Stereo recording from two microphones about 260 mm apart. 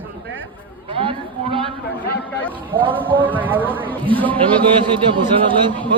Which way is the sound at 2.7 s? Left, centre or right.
Centre.